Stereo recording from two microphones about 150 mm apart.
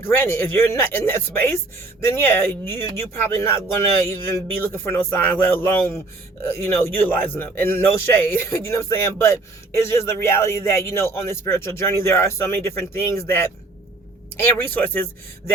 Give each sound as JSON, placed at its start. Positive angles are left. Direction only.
{"t": 0.0, "sound": "a man's voice", "side_deg": 15}